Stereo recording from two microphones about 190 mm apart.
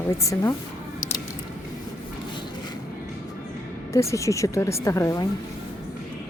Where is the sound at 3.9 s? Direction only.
15° left (ahead or behind).